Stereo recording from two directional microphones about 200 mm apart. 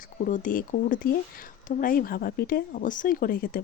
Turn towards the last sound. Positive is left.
turn(degrees=45)  # may be behind; listen again after turning